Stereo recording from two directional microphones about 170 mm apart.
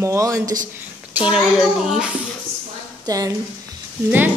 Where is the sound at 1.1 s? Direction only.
5° right (ahead or behind).